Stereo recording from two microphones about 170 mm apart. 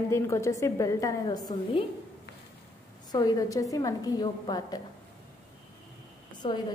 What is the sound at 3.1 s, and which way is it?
A woman's voice, 20° left (ahead or behind).